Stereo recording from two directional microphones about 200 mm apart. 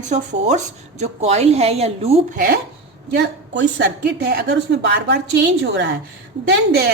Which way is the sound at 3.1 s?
60° right (ahead or behind).